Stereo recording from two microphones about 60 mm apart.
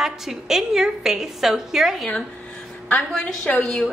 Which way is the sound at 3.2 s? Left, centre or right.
Left.